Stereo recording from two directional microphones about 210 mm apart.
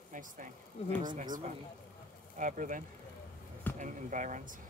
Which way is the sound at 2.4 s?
35° right (ahead or behind).